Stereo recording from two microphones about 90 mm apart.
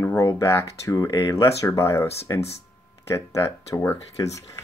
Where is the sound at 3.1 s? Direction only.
30° left (ahead or behind).